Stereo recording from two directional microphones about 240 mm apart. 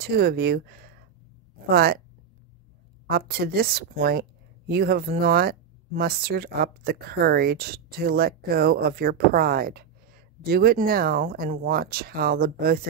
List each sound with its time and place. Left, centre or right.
0.0 s speech: right
3.1 s speech: right